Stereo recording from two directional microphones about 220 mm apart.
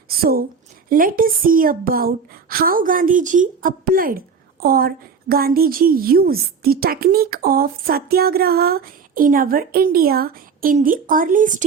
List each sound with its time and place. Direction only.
0.2 s a woman's voice: 45° right (ahead or behind)